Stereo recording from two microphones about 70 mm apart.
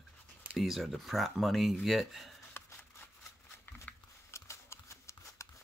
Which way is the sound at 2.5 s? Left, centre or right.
Left.